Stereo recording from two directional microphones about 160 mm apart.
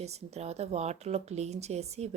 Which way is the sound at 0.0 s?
40° right (ahead or behind).